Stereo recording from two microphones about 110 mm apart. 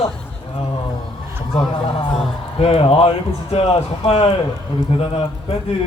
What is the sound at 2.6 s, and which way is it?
Speech, 60° left (ahead or behind).